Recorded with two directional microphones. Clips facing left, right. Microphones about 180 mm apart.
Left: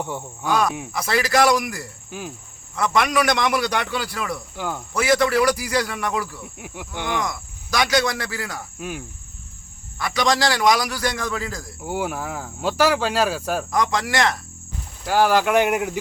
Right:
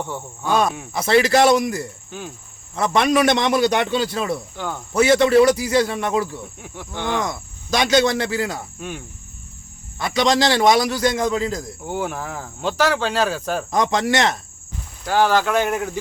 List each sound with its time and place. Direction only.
0.0 s speech: 10° left (ahead or behind)
0.9 s a man's voice: 25° right (ahead or behind)
2.0 s cricket: 10° left (ahead or behind)
2.7 s a man's voice: 25° right (ahead or behind)
4.5 s speech: 5° left (ahead or behind)
4.9 s a man's voice: 25° right (ahead or behind)
6.6 s speech: 10° left (ahead or behind)
7.2 s a man's voice: 25° right (ahead or behind)
8.8 s speech: 5° left (ahead or behind)
10.0 s a man's voice: 20° right (ahead or behind)
11.9 s speech: 5° left (ahead or behind)
13.7 s a man's voice: 25° right (ahead or behind)
15.0 s speech: 10° left (ahead or behind)